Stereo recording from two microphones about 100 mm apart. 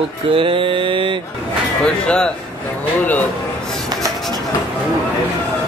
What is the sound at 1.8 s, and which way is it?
Speech, 10° left (ahead or behind).